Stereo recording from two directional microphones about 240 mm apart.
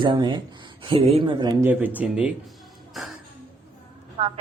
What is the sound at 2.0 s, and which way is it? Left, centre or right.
Speech, centre.